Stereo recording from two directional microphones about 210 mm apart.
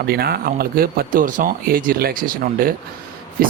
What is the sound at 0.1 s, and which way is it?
Speech, 45° right (ahead or behind).